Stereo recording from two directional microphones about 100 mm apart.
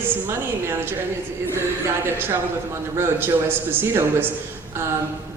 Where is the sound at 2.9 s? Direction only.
25° right (ahead or behind).